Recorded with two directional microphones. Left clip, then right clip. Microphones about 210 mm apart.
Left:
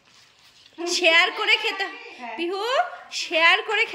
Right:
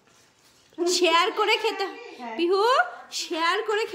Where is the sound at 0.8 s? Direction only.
5° right (ahead or behind).